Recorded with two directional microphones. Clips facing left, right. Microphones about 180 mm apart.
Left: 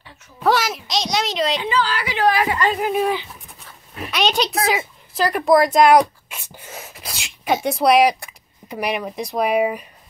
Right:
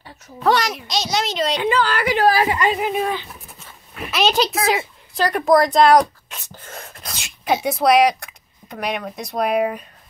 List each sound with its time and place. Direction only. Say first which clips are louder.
0.4 s speech: even; 5° left (ahead or behind)
1.6 s a woman's voice: right 3 dB; 55° right (ahead or behind)
2.2 s speech: even; 30° right (ahead or behind)
2.8 s a woman's voice: left 2 dB; 5° left (ahead or behind)